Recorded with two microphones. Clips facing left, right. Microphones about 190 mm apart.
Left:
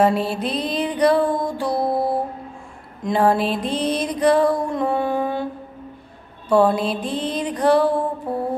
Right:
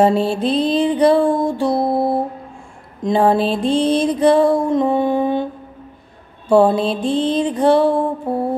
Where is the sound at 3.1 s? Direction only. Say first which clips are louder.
Right 3 dB; 25° right (ahead or behind).